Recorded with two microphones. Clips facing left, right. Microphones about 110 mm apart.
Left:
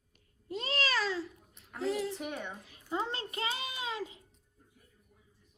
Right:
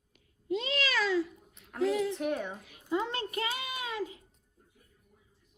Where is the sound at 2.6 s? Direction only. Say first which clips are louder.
Right 3 dB; 30° left (ahead or behind).